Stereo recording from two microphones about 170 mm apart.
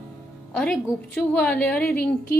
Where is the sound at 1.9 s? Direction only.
65° left (ahead or behind).